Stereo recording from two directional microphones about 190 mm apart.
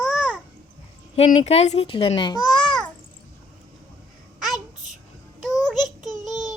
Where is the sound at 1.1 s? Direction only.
35° left (ahead or behind).